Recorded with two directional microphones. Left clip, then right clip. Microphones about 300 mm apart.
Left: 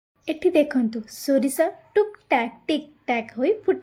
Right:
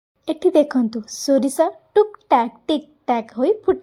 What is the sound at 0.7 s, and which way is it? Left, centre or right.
A woman's voice, centre.